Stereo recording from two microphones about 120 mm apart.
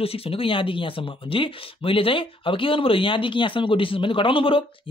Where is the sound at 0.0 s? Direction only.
55° left (ahead or behind).